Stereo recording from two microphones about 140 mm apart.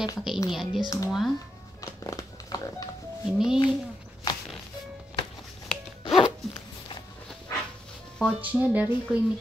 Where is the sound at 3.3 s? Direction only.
5° right (ahead or behind).